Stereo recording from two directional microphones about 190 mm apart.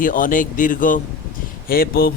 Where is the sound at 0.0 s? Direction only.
45° left (ahead or behind).